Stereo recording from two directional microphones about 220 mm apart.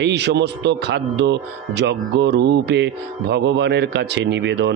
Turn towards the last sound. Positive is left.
turn(degrees=-50)  # may be behind; listen again after turning